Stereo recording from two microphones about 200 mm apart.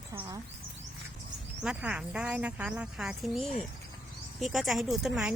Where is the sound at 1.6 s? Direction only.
5° right (ahead or behind).